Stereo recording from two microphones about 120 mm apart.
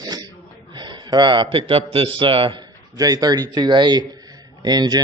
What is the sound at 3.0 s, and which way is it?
Speech, 30° right (ahead or behind).